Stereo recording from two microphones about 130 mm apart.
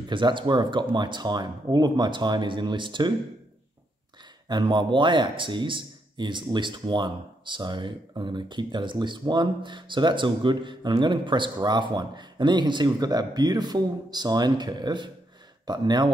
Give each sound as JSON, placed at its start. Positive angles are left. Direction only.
{"t": 0.1, "sound": "speech", "side_deg": -40}
{"t": 4.5, "sound": "speech", "side_deg": -35}